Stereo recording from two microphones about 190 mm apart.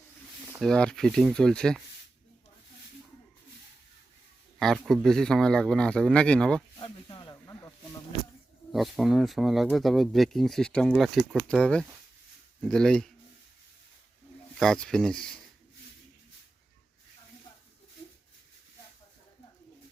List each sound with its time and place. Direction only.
0.6 s speech: 5° left (ahead or behind)
4.6 s speech: centre (ahead or behind)
6.7 s snake: 25° left (ahead or behind)
8.7 s speech: centre (ahead or behind)
14.6 s speech: 5° left (ahead or behind)